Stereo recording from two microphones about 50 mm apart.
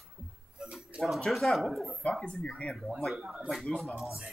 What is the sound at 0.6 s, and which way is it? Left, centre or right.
Speech, centre.